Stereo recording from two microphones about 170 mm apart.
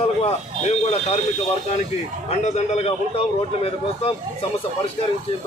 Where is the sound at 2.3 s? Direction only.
40° left (ahead or behind).